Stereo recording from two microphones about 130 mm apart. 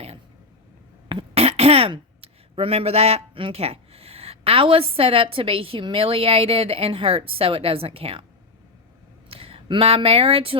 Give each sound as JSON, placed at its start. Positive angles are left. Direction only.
{"t": 1.0, "sound": "speech", "side_deg": -45}
{"t": 9.3, "sound": "speech", "side_deg": -45}